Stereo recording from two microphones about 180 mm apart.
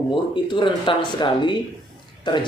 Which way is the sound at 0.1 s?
25° left (ahead or behind).